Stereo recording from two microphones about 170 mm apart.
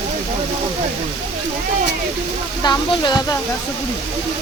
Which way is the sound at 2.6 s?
25° left (ahead or behind).